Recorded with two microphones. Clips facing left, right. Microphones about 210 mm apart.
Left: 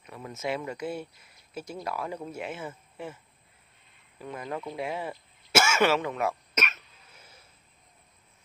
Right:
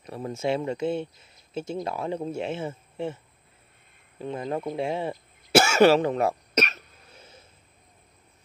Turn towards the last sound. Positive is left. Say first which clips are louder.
# right 6 dB
turn(degrees=-25)  # may be behind; listen again after turning